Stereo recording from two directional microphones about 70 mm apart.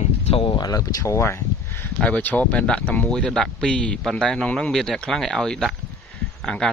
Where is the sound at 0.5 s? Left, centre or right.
Left.